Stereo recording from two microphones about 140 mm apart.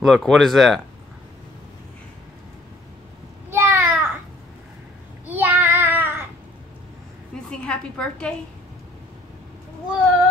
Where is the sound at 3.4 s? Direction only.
15° right (ahead or behind).